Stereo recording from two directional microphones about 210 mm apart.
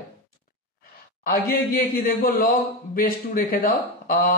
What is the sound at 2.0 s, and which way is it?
Speech, 45° left (ahead or behind).